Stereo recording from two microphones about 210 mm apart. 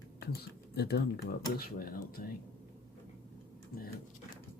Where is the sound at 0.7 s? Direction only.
50° left (ahead or behind).